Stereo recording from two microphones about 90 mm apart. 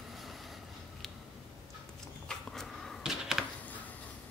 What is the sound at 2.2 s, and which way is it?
Dog, 5° left (ahead or behind).